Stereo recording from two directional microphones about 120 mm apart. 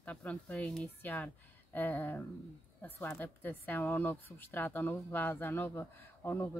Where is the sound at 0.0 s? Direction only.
10° left (ahead or behind).